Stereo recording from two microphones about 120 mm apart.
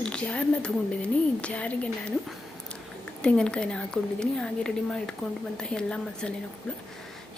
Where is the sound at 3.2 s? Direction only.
5° left (ahead or behind).